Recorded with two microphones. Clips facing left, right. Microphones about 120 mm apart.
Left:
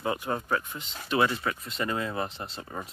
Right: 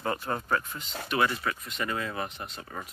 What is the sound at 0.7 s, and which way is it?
Speech, 25° left (ahead or behind).